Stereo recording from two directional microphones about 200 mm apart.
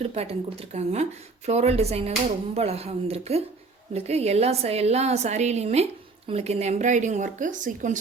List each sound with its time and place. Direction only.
0.0 s a woman's voice: 30° right (ahead or behind)